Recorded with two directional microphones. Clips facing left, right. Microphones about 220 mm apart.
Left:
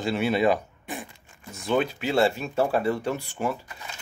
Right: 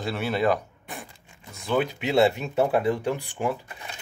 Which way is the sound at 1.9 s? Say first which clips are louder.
Right 2 dB; 20° right (ahead or behind).